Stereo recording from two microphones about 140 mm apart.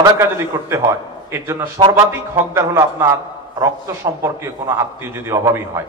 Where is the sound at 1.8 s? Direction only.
35° right (ahead or behind).